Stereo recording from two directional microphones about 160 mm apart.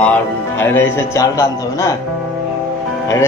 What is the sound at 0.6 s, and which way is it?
A man's voice, 15° left (ahead or behind).